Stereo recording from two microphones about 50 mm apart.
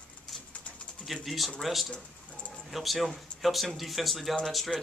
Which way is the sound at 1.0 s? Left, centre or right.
Centre.